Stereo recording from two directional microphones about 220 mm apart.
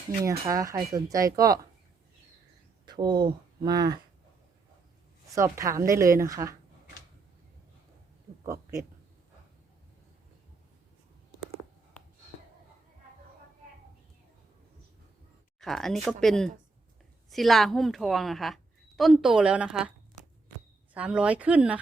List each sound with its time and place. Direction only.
0.3 s speech: 15° right (ahead or behind)
2.8 s speech: 20° right (ahead or behind)
5.3 s speech: 15° right (ahead or behind)
15.6 s a woman's voice: centre (ahead or behind)
20.9 s speech: 5° right (ahead or behind)